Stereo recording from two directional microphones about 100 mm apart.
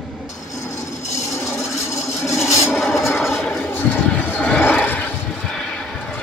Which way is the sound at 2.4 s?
30° left (ahead or behind).